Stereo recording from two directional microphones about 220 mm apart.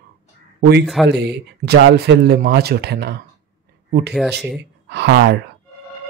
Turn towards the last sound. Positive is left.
turn(degrees=-50)  # may be behind; listen again after turning